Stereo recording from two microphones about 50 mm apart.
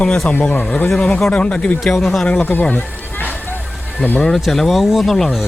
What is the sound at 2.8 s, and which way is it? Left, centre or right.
Run, left.